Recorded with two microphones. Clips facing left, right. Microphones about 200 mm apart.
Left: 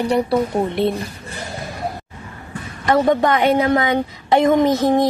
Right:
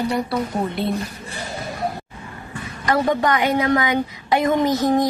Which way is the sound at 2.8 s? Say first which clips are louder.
Left 4 dB; 25° left (ahead or behind).